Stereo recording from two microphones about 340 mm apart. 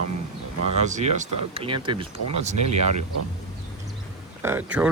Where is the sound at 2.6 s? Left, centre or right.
Right.